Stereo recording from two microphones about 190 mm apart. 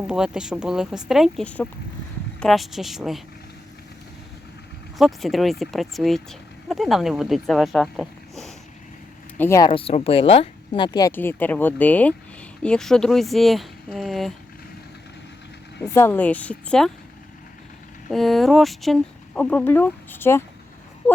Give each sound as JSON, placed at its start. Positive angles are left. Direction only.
{"t": 0.1, "sound": "speech", "side_deg": -5}
{"t": 4.9, "sound": "speech", "side_deg": 0}
{"t": 9.4, "sound": "a woman's voice", "side_deg": 15}
{"t": 9.6, "sound": "speech", "side_deg": 30}
{"t": 11.1, "sound": "speech", "side_deg": 10}
{"t": 15.8, "sound": "a woman's voice", "side_deg": 10}
{"t": 18.1, "sound": "speech", "side_deg": 0}